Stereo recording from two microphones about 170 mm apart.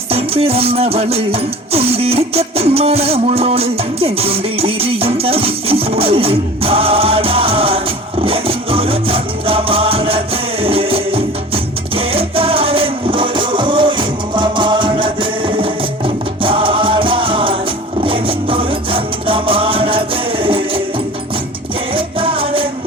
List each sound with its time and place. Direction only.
0.1 s music: 35° right (ahead or behind)
21.9 s music: 30° right (ahead or behind)